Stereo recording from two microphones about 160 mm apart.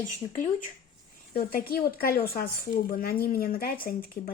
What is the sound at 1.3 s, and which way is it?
Speech, 70° left (ahead or behind).